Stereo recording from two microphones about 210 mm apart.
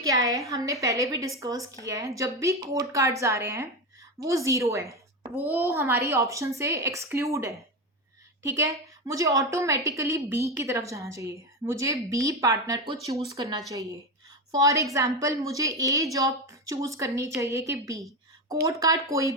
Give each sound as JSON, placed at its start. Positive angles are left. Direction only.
{"t": 0.0, "sound": "a woman's voice", "side_deg": -15}